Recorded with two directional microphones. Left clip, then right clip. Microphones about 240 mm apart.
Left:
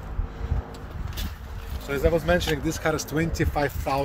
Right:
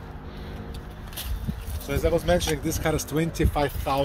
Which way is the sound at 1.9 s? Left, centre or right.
Centre.